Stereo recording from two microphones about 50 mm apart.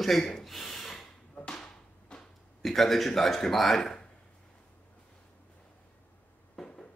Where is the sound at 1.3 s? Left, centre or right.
Centre.